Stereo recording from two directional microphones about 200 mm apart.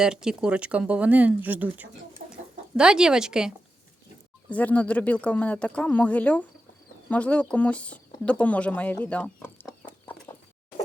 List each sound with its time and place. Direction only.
0.0 s speech: 5° right (ahead or behind)
2.2 s chicken: 35° right (ahead or behind)
2.7 s speech: 5° right (ahead or behind)
4.4 s speech: 5° left (ahead or behind)